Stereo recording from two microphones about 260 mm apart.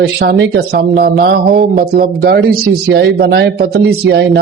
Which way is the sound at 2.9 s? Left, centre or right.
Right.